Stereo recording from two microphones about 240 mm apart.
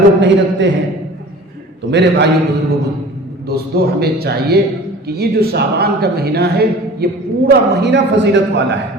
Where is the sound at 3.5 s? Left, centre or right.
Right.